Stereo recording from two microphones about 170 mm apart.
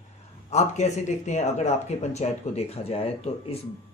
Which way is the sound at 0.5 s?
40° left (ahead or behind).